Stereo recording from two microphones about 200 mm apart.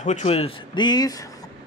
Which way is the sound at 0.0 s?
35° left (ahead or behind).